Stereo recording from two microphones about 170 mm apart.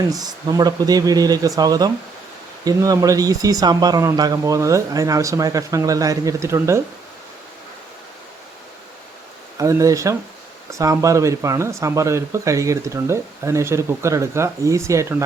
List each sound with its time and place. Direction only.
0.1 s speech: 20° right (ahead or behind)
9.6 s speech: 20° right (ahead or behind)